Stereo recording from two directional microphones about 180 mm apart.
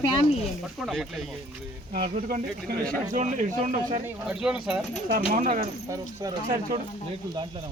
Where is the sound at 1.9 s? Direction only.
55° right (ahead or behind).